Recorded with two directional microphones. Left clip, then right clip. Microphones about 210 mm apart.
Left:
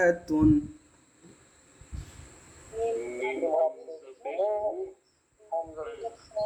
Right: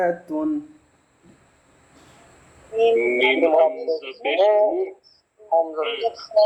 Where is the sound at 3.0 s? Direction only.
50° right (ahead or behind).